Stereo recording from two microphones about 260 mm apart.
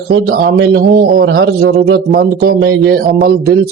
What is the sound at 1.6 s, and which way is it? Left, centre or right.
Speech, right.